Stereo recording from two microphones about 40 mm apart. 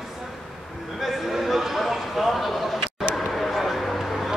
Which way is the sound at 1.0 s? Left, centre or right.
Centre.